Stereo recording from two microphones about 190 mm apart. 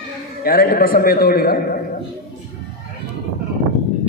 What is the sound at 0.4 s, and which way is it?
A man's voice, 50° left (ahead or behind).